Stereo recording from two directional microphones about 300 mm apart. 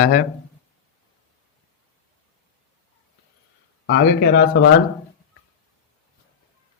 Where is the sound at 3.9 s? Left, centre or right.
Left.